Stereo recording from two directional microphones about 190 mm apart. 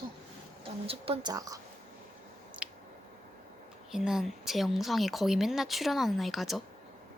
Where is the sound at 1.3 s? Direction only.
20° right (ahead or behind).